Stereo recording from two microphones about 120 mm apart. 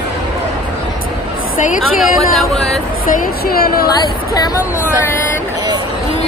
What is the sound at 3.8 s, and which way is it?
Speech, 35° left (ahead or behind).